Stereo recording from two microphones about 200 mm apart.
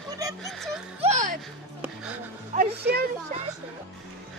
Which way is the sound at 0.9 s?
35° right (ahead or behind).